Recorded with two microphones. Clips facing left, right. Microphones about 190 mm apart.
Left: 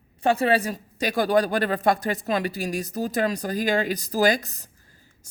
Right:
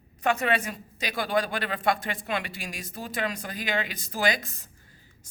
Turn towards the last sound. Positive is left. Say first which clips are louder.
# left 6 dB
turn(degrees=40)  # may be behind; listen again after turning